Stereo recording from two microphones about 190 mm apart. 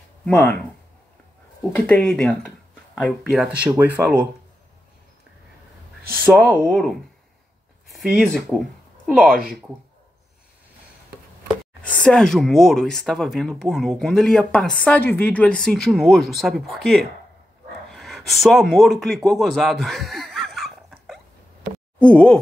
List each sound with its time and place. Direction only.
0.2 s speech: 10° left (ahead or behind)
1.8 s speech: 5° left (ahead or behind)
6.2 s speech: centre (ahead or behind)
9.3 s speech: 50° right (ahead or behind)
11.8 s speech: 5° left (ahead or behind)
17.9 s a sound: centre (ahead or behind)
22.0 s speech: 5° left (ahead or behind)